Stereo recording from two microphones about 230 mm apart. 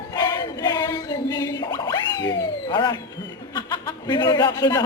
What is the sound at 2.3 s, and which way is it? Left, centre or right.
A man's voice, centre.